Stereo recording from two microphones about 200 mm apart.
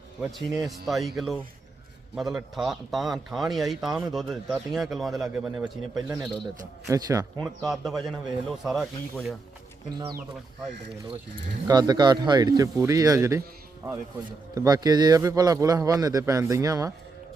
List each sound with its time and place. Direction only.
0.2 s speech: centre (ahead or behind)
6.8 s a man's voice: 15° right (ahead or behind)
7.6 s speech: centre (ahead or behind)
9.9 s speech: 20° right (ahead or behind)
11.7 s speech: 20° right (ahead or behind)
14.5 s a man's voice: 20° right (ahead or behind)